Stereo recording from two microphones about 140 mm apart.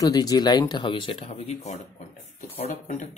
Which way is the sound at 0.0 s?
25° left (ahead or behind).